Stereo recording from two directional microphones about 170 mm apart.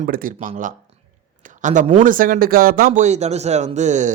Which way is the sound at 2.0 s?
55° right (ahead or behind).